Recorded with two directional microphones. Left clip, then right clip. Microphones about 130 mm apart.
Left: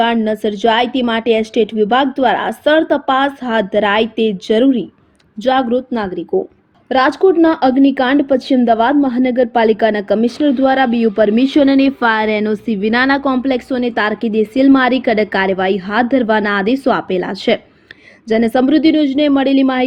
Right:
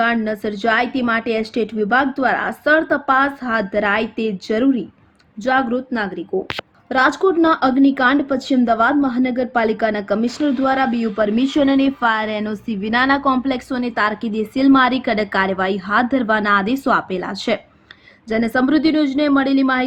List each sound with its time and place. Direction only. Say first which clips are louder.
0.0 s a woman's voice: left 4 dB; 35° left (ahead or behind)